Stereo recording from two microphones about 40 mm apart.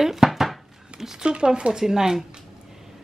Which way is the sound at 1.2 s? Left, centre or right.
Right.